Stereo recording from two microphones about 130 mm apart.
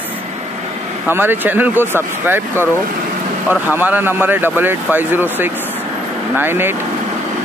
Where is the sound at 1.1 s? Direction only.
15° right (ahead or behind).